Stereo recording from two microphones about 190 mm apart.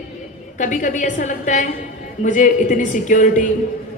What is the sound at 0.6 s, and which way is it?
A woman's voice, 45° left (ahead or behind).